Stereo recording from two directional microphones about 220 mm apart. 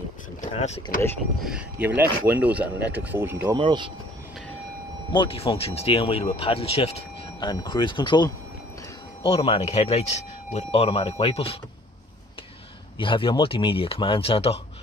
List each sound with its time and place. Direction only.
0.4 s speech: 30° left (ahead or behind)
1.4 s speech: 5° right (ahead or behind)
3.4 s speech: 20° right (ahead or behind)
5.1 s speech: 25° left (ahead or behind)
12.9 s speech: 20° left (ahead or behind)